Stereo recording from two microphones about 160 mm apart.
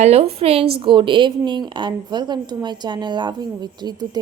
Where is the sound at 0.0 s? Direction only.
40° right (ahead or behind).